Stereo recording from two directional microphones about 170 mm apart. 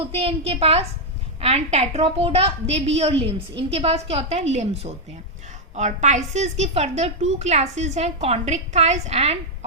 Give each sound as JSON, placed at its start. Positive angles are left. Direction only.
{"t": 0.0, "sound": "a woman's voice", "side_deg": -35}